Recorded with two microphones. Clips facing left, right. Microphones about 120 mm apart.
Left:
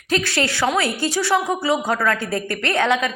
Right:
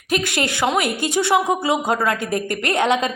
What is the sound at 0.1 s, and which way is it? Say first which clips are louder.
A woman's voice: even; 15° right (ahead or behind).